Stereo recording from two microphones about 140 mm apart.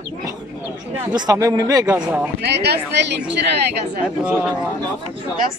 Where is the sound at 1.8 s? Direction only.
10° right (ahead or behind).